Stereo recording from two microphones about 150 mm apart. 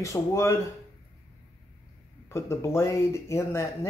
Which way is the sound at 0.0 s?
20° left (ahead or behind).